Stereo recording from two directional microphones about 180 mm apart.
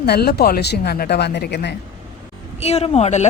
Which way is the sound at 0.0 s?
60° left (ahead or behind).